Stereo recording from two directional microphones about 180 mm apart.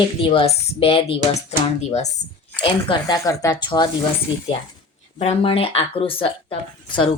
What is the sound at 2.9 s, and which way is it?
A woman's voice, 20° left (ahead or behind).